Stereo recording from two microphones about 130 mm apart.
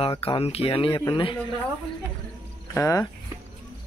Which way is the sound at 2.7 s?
20° left (ahead or behind).